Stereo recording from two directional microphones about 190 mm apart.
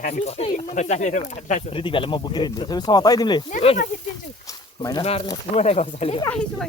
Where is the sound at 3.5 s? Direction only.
40° left (ahead or behind).